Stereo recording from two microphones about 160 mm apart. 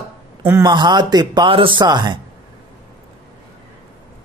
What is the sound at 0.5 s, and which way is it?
Speech, 25° right (ahead or behind).